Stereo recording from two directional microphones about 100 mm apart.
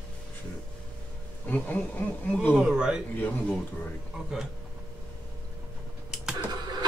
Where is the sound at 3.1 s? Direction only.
15° left (ahead or behind).